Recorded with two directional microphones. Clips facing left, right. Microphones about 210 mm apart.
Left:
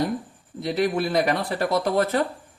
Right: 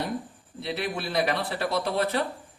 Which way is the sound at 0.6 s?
45° left (ahead or behind).